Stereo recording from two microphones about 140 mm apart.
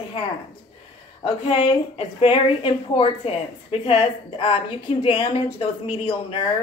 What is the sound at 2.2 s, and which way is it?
A woman's voice, 40° left (ahead or behind).